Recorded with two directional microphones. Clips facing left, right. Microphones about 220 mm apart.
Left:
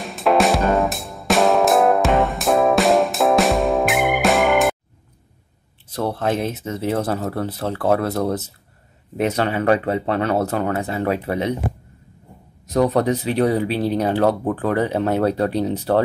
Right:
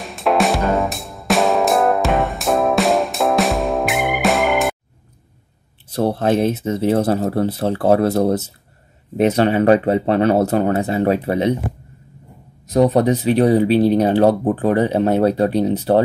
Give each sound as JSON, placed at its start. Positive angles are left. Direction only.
{"t": 0.0, "sound": "music", "side_deg": 0}
{"t": 5.9, "sound": "speech", "side_deg": -30}
{"t": 12.7, "sound": "speech", "side_deg": -20}